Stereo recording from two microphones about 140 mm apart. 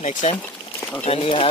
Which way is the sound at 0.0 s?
55° left (ahead or behind).